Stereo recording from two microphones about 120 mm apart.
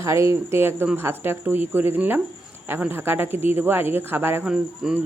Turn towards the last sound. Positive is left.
turn(degrees=-5)  # may be behind; listen again after turning